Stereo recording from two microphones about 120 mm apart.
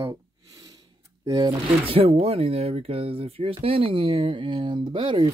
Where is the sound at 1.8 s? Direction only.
50° right (ahead or behind).